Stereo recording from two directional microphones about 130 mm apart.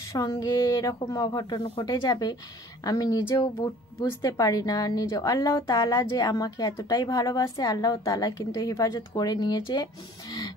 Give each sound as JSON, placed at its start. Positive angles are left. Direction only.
{"t": 0.3, "sound": "speech", "side_deg": 30}